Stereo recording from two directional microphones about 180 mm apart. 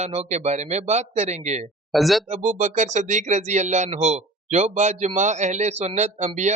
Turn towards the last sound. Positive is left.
turn(degrees=-40)  # may be behind; listen again after turning